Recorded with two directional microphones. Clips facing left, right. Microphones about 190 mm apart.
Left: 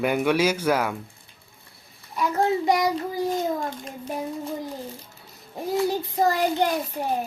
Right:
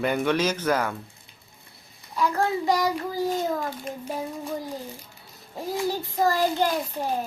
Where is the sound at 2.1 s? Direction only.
20° left (ahead or behind).